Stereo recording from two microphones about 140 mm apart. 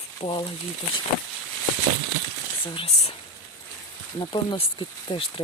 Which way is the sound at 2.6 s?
40° left (ahead or behind).